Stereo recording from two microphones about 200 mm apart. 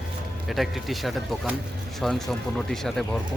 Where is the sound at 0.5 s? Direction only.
Centre (ahead or behind).